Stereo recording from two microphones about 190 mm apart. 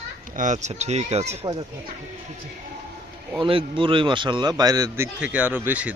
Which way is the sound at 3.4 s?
25° right (ahead or behind).